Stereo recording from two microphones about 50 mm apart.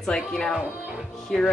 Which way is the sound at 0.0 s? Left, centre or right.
Centre.